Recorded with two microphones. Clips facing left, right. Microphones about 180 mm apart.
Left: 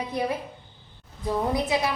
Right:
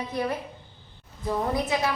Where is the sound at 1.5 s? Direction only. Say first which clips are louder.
Left 1 dB; 15° left (ahead or behind).